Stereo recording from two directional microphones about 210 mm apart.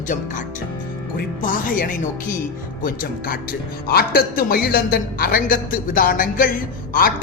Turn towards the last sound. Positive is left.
turn(degrees=45)  # may be behind; listen again after turning